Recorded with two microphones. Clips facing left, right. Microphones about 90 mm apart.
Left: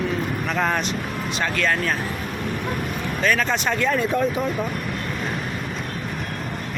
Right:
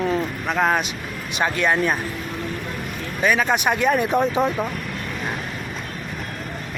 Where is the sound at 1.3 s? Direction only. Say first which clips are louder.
Right 4 dB; 15° right (ahead or behind).